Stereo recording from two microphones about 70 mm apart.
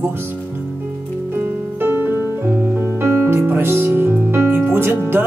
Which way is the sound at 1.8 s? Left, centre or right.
Right.